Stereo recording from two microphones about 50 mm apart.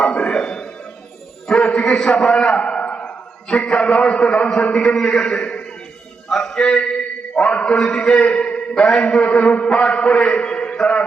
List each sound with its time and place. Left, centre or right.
0.0 s music: centre
1.5 s a sound: centre
3.6 s a man's voice: centre
6.2 s a sound: centre
7.5 s a man's voice: left
8.7 s a man's voice: centre